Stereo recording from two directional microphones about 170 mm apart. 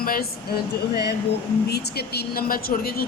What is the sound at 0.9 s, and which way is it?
Speech, 75° left (ahead or behind).